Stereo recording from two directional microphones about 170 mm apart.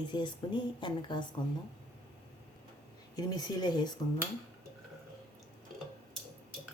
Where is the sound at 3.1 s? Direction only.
25° left (ahead or behind).